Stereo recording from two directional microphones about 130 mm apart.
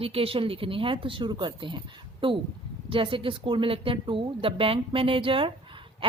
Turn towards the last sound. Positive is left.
turn(degrees=-45)  # may be behind; listen again after turning